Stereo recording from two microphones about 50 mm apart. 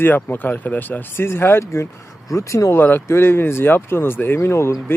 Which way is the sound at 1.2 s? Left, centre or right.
Left.